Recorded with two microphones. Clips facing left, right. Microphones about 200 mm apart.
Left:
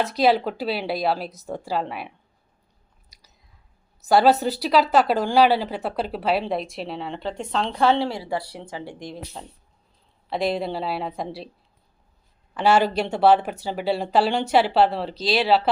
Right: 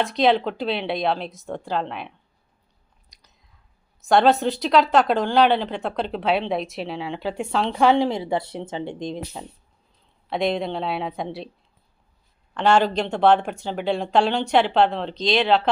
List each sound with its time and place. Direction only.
0.0 s speech: 5° left (ahead or behind)
3.1 s chewing: 5° left (ahead or behind)
4.0 s speech: 5° left (ahead or behind)
7.9 s a woman's voice: 15° right (ahead or behind)
10.2 s speech: centre (ahead or behind)
12.5 s speech: 5° left (ahead or behind)